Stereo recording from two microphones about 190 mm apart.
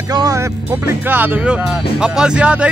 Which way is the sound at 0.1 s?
20° right (ahead or behind).